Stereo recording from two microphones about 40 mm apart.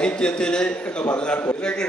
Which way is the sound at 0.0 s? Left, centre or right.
Left.